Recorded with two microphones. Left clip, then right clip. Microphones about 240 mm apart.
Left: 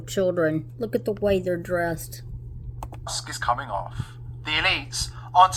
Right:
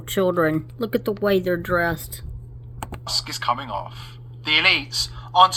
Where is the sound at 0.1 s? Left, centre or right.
Centre.